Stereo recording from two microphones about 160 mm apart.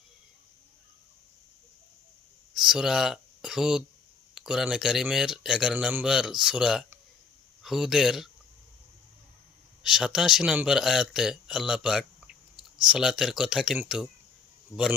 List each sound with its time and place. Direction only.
2.6 s a man's voice: 5° right (ahead or behind)
9.8 s a man's voice: 5° right (ahead or behind)
14.7 s a man's voice: 20° left (ahead or behind)